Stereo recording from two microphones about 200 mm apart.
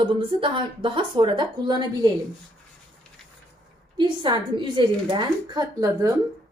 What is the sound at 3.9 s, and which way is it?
A woman's voice, 25° right (ahead or behind).